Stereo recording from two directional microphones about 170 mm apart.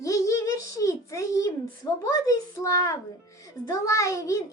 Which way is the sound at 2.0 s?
20° left (ahead or behind).